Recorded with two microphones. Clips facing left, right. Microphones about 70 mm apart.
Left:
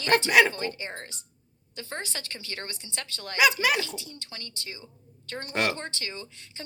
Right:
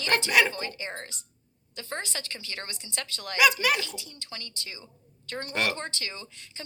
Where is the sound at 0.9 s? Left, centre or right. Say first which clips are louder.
Right 1 dB; right.